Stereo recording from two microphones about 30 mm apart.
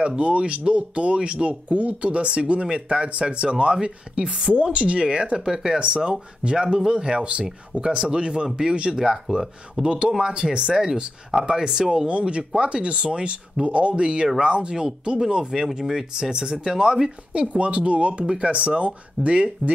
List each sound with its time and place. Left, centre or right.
0.0 s speech: right
5.5 s speech: centre
5.8 s speech: right
8.9 s speech: centre
9.8 s speech: right
12.1 s speech: right
13.7 s speech: right
14.0 s speech: right
17.3 s speech: right